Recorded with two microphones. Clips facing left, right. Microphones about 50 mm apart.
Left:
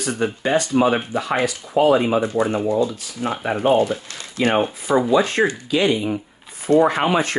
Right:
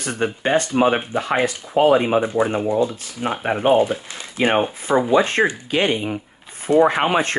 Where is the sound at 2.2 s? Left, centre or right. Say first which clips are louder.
Even; right.